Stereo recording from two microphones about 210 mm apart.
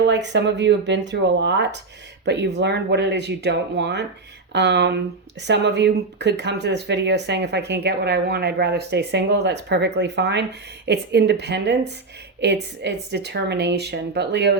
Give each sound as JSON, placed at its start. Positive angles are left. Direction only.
{"t": 0.1, "sound": "speech", "side_deg": -55}